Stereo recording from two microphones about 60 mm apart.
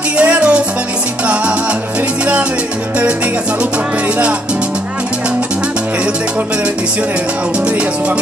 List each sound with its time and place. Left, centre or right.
0.2 s music: right
1.2 s salsa music: right